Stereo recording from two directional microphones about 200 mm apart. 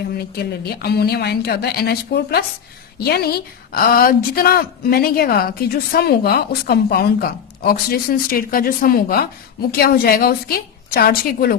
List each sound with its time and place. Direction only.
0.8 s a woman's voice: 50° left (ahead or behind)